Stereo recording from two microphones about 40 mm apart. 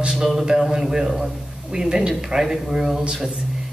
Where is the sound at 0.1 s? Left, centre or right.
Centre.